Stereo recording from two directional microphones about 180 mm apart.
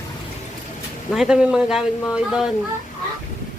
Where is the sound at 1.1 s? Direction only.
5° right (ahead or behind).